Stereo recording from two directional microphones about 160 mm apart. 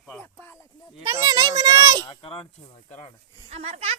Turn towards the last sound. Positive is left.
turn(degrees=-40)  # may be behind; listen again after turning